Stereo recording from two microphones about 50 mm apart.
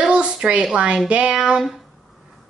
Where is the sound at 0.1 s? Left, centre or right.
Centre.